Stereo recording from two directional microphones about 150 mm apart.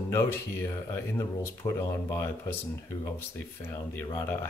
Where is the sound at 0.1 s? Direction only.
15° left (ahead or behind).